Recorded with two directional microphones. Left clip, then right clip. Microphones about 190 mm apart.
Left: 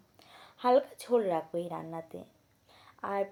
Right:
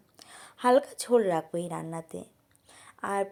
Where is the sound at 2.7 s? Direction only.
30° right (ahead or behind).